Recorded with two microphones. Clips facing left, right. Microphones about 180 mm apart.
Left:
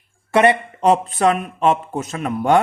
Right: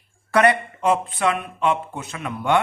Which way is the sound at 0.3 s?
25° left (ahead or behind).